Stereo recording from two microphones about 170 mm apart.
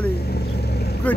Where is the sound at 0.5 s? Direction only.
70° left (ahead or behind).